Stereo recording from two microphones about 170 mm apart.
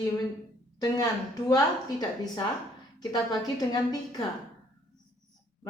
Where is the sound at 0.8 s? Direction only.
20° left (ahead or behind).